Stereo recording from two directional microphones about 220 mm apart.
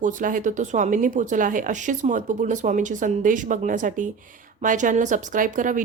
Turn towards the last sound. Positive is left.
turn(degrees=-35)  # may be behind; listen again after turning